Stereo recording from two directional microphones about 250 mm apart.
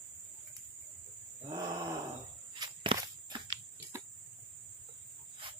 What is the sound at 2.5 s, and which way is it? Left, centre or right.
Walk, centre.